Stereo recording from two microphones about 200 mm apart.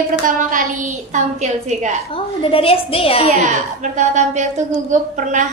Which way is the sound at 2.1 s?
25° left (ahead or behind).